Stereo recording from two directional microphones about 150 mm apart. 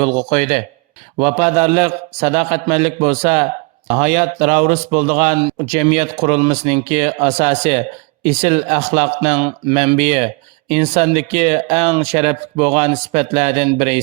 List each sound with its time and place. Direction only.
0.0 s a man's voice: 45° right (ahead or behind)